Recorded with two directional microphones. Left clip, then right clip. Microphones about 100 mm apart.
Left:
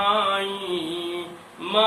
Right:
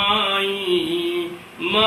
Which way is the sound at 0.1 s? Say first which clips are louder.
Right 2 dB; 15° left (ahead or behind).